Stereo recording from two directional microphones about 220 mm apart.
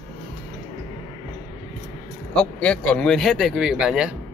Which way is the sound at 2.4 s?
5° left (ahead or behind).